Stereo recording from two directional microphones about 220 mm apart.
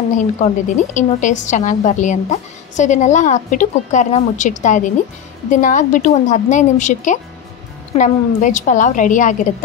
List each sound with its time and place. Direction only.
0.1 s a woman's voice: 30° left (ahead or behind)